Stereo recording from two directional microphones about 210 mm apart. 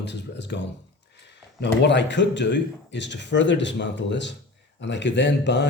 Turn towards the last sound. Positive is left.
turn(degrees=55)  # may be behind; listen again after turning